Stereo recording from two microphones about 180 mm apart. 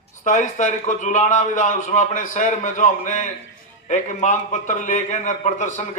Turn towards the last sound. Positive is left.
turn(degrees=40)  # may be behind; listen again after turning